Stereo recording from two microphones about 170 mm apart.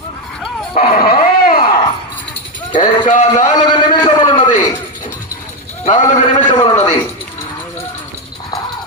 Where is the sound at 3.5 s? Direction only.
25° left (ahead or behind).